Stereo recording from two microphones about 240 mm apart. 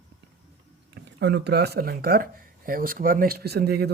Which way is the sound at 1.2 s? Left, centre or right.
Right.